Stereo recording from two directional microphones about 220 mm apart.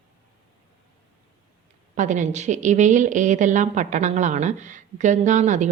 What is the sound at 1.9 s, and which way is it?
A woman's voice, 35° right (ahead or behind).